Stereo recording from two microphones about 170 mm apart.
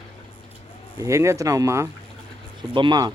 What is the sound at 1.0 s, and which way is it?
Speech, 15° right (ahead or behind).